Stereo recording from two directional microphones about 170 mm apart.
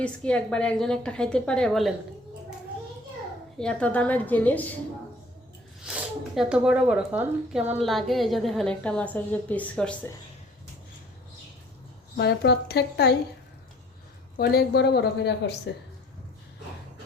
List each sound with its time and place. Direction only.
0.0 s a woman's voice: 5° left (ahead or behind)
3.6 s a woman's voice: 5° left (ahead or behind)
5.8 s a woman's voice: 5° right (ahead or behind)
7.8 s a woman's voice: centre (ahead or behind)
12.1 s a woman's voice: 75° left (ahead or behind)
14.3 s a woman's voice: 65° left (ahead or behind)